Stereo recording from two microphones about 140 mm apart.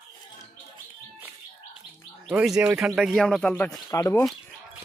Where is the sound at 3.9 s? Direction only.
20° left (ahead or behind).